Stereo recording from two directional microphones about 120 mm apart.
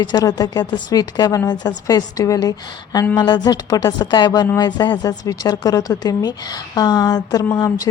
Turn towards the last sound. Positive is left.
turn(degrees=35)  # may be behind; listen again after turning